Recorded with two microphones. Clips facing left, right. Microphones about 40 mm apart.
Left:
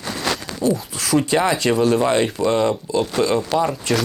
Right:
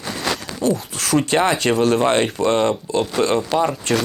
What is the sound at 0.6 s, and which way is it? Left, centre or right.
Speech, right.